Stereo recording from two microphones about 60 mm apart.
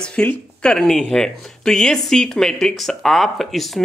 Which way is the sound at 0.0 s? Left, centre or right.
Left.